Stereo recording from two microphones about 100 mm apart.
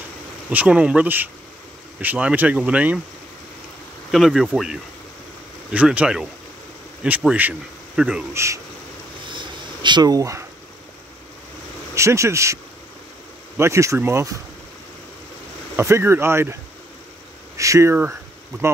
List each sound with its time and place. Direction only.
0.5 s speech: 15° right (ahead or behind)
4.1 s speech: centre (ahead or behind)
5.7 s speech: 10° right (ahead or behind)
7.2 s speech: 15° right (ahead or behind)
7.9 s speech: 5° right (ahead or behind)
8.3 s speech: 30° right (ahead or behind)
9.3 s a sound: 50° right (ahead or behind); by 10.4 s 35° right (ahead or behind)
11.9 s speech: 30° right (ahead or behind)
13.6 s speech: 30° right (ahead or behind)
15.7 s speech: 25° right (ahead or behind)
17.6 s speech: 30° right (ahead or behind)